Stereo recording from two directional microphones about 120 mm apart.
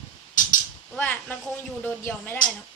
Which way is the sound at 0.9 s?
15° left (ahead or behind).